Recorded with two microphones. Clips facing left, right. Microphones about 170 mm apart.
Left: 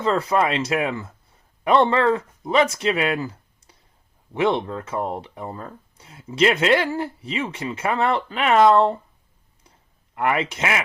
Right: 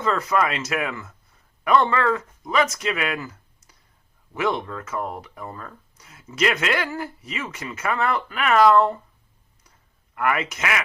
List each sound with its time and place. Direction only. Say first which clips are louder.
0.0 s speech: left 2 dB; 30° left (ahead or behind)
10.2 s speech: left 2 dB; 25° left (ahead or behind)